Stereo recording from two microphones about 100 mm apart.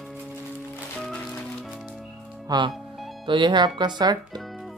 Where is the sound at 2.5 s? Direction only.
40° right (ahead or behind).